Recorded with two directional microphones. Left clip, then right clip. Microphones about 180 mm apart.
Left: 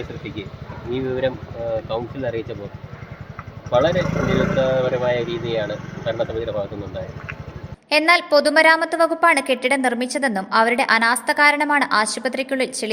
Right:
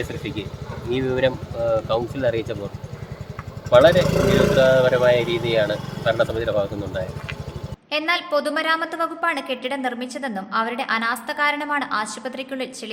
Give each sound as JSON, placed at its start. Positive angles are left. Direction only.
{"t": 0.9, "sound": "speech", "side_deg": -20}
{"t": 3.7, "sound": "speech", "side_deg": -20}
{"t": 4.0, "sound": "speech", "side_deg": -45}
{"t": 4.5, "sound": "speech", "side_deg": -20}
{"t": 7.9, "sound": "a woman's voice", "side_deg": 35}